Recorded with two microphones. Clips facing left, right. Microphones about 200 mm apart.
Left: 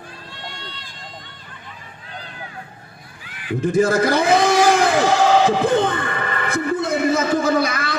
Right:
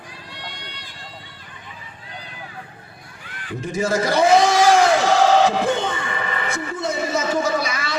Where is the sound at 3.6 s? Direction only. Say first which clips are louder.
Left 5 dB; 55° left (ahead or behind).